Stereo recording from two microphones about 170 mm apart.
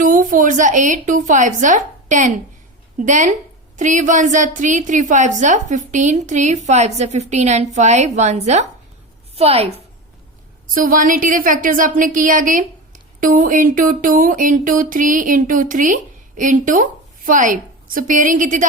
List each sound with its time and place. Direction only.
0.0 s a woman's voice: 50° right (ahead or behind); by 9.8 s 35° right (ahead or behind)
10.8 s speech: 55° right (ahead or behind)